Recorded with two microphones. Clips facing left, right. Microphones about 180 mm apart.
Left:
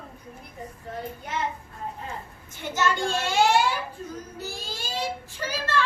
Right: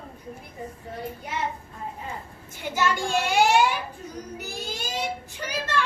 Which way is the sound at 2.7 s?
10° right (ahead or behind).